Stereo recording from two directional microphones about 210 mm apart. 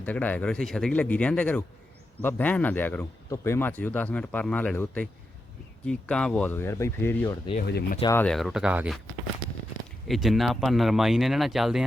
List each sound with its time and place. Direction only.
0.0 s speech: 10° left (ahead or behind)
7.7 s speech: 50° left (ahead or behind)
8.1 s speech: 5° left (ahead or behind)
10.1 s speech: centre (ahead or behind)